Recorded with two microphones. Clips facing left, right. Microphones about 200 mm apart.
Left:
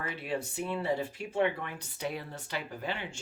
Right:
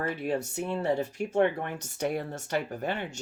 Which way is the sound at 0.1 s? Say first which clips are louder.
Right 5 dB; 45° right (ahead or behind).